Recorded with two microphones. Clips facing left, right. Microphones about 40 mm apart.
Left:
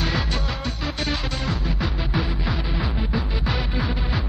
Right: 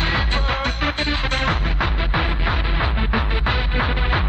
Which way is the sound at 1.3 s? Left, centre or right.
Right.